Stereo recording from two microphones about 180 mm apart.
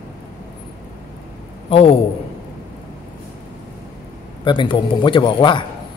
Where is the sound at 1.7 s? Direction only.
30° left (ahead or behind).